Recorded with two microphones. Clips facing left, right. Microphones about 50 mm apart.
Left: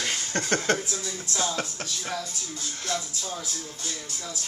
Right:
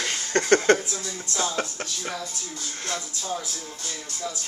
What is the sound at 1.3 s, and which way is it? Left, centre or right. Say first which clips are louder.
Music: right 2 dB; centre.